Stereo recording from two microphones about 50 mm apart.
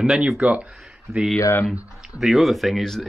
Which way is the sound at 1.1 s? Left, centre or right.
Right.